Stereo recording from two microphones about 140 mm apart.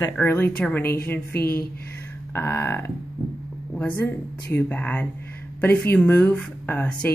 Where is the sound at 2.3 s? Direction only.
15° left (ahead or behind).